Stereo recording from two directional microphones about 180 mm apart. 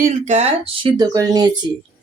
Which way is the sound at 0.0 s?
40° right (ahead or behind).